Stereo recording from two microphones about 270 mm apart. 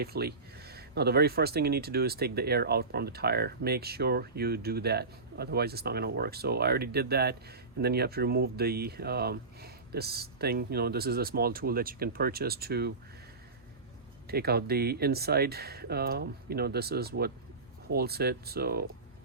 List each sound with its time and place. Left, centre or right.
0.0 s speech: right
14.3 s speech: right